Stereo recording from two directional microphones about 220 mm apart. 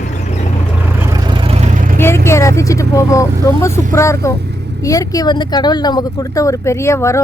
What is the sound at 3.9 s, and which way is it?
Speech, 15° left (ahead or behind).